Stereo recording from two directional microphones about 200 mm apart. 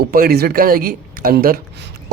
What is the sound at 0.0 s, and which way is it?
Speech, 50° right (ahead or behind).